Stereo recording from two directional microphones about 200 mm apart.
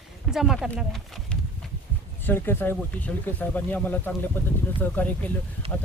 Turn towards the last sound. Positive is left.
turn(degrees=-30)  # may be behind; listen again after turning